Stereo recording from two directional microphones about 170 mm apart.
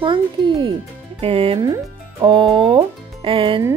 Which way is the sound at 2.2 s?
30° right (ahead or behind).